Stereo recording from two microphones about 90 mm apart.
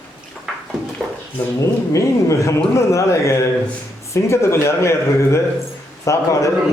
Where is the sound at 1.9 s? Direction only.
35° left (ahead or behind).